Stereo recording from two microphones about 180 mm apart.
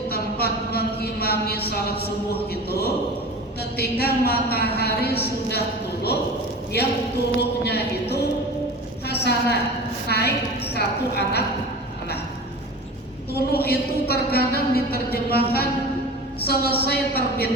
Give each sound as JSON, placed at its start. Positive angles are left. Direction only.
{"t": 0.1, "sound": "a sound", "side_deg": 60}
{"t": 3.8, "sound": "a woman's voice", "side_deg": 60}
{"t": 7.3, "sound": "a woman's voice", "side_deg": 65}
{"t": 9.0, "sound": "a sound", "side_deg": 65}
{"t": 10.1, "sound": "a woman's voice", "side_deg": 65}
{"t": 13.3, "sound": "a woman's voice", "side_deg": 60}